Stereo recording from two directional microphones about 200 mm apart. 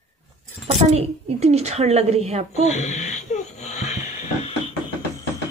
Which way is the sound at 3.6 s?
35° left (ahead or behind).